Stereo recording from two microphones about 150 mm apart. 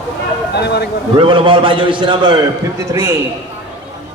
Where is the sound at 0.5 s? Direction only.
90° left.